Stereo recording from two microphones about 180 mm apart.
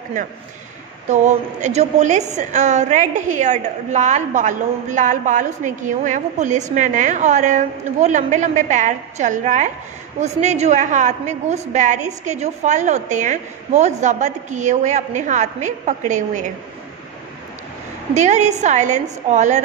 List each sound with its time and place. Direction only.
1.0 s a woman's voice: 40° right (ahead or behind)
18.1 s a woman's voice: 40° right (ahead or behind)